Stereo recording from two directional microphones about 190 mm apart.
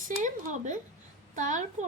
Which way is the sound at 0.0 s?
40° right (ahead or behind).